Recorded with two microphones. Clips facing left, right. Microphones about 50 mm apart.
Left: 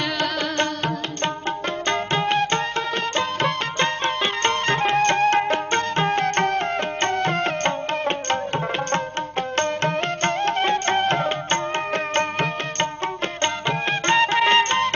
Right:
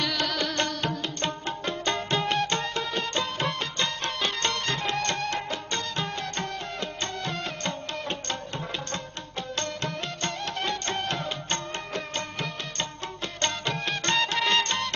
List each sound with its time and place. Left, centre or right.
0.0 s music: left
3.2 s music: left
9.6 s music: left
13.4 s music: left